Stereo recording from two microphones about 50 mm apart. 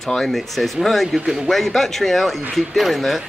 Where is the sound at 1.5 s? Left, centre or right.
Centre.